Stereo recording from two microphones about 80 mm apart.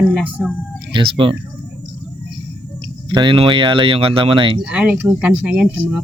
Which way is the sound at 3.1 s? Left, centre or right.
Right.